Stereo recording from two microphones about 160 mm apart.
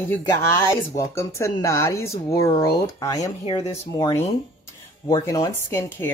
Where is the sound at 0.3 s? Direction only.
25° left (ahead or behind).